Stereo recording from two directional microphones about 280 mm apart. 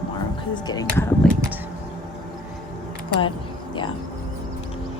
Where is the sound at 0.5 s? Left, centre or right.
Centre.